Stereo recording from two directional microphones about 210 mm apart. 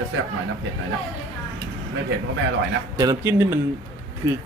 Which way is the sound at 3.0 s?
15° right (ahead or behind).